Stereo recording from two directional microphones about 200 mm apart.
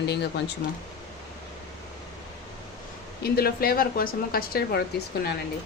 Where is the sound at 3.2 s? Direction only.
50° left (ahead or behind).